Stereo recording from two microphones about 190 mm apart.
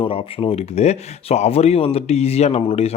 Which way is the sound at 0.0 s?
30° left (ahead or behind).